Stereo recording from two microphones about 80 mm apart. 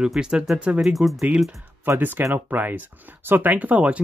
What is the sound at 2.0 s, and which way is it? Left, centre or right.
Speech, right.